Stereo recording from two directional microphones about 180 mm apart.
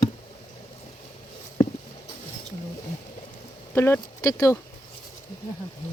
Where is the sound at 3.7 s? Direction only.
15° left (ahead or behind).